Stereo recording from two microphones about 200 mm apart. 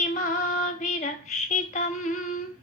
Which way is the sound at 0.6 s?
40° left (ahead or behind).